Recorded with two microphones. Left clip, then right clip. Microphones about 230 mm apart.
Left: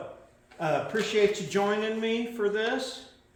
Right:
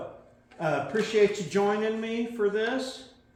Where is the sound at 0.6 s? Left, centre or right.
Left.